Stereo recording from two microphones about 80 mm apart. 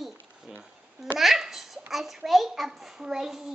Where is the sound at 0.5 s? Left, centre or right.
Right.